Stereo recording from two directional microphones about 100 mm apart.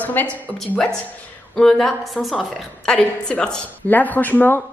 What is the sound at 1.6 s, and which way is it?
A woman's voice, 5° left (ahead or behind).